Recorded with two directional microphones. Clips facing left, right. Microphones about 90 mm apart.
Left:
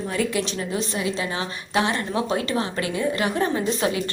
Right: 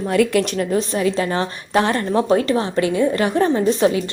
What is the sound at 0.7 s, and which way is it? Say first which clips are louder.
A woman's voice: right 7 dB; 40° right (ahead or behind).